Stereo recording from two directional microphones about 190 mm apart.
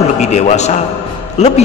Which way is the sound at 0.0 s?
35° left (ahead or behind).